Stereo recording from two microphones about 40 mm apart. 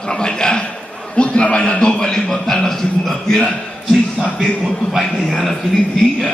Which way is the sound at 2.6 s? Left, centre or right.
Centre.